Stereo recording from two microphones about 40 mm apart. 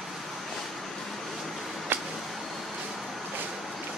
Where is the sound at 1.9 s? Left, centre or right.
Right.